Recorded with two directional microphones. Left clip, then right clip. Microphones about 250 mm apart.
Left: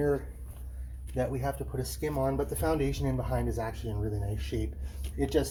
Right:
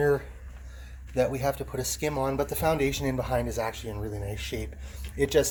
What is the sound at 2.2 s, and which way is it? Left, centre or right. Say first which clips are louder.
Speech: right 1 dB; right.